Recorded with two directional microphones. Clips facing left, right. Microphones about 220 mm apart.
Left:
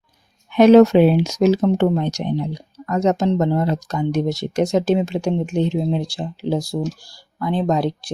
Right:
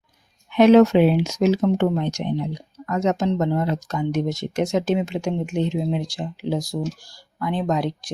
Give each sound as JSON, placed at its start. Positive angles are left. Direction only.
{"t": 0.5, "sound": "speech", "side_deg": 40}